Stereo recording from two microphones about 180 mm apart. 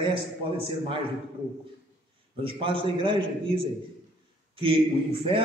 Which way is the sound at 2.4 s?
30° right (ahead or behind).